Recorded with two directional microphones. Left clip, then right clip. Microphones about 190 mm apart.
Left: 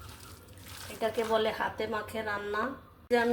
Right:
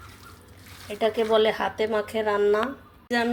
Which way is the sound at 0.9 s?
35° right (ahead or behind).